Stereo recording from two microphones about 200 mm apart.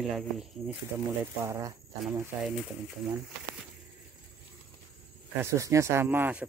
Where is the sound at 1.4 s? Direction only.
15° right (ahead or behind).